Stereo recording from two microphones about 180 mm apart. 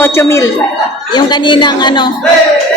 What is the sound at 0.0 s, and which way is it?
Speech, 15° left (ahead or behind).